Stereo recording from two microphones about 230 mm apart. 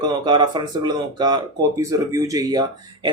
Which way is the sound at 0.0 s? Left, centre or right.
Centre.